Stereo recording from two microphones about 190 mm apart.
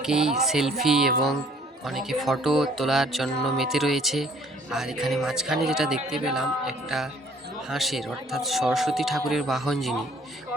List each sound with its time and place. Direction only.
0.0 s speech: 5° right (ahead or behind)